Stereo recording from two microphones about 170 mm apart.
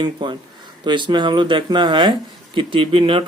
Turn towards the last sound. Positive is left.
turn(degrees=-30)  # may be behind; listen again after turning